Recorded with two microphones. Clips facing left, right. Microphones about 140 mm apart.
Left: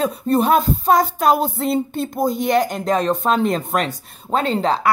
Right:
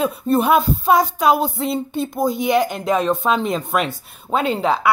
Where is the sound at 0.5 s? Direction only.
5° right (ahead or behind).